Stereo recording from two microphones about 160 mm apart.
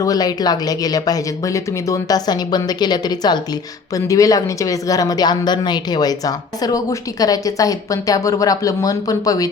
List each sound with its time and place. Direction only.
0.0 s speech: 25° left (ahead or behind)